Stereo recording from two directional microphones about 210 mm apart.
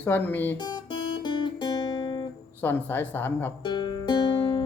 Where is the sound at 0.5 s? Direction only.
20° left (ahead or behind).